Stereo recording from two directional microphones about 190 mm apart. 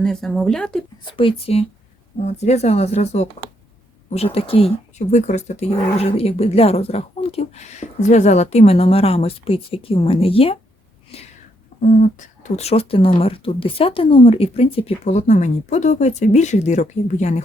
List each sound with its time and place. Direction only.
0.0 s speech: 5° left (ahead or behind)
1.1 s speech: 30° left (ahead or behind)
11.8 s speech: 40° left (ahead or behind)